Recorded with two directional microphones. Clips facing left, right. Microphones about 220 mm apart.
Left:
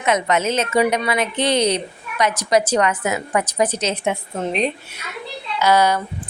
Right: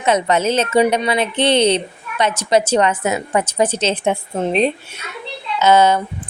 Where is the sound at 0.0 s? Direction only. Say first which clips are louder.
Right 3 dB; 30° right (ahead or behind).